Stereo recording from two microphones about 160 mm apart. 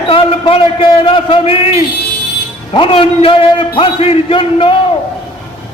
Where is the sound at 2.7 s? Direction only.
35° left (ahead or behind).